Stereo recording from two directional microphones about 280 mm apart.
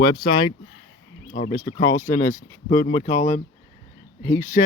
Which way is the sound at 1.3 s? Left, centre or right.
Left.